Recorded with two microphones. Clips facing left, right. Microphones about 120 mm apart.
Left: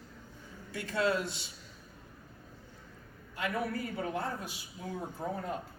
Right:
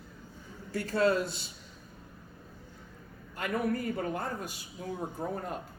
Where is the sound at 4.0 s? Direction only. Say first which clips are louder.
Right 1 dB; 50° right (ahead or behind).